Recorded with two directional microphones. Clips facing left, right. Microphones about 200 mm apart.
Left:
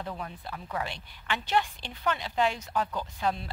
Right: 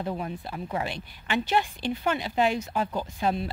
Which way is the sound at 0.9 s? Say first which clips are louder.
Right 6 dB; 10° right (ahead or behind).